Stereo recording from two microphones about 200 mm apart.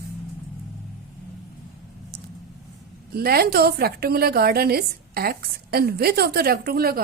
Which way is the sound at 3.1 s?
50° right (ahead or behind).